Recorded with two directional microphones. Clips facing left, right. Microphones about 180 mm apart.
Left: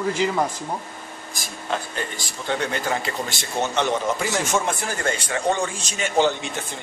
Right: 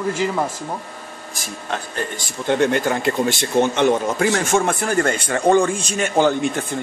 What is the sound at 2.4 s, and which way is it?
Speech, 55° right (ahead or behind).